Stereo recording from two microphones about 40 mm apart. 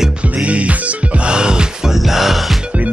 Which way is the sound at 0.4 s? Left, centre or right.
Right.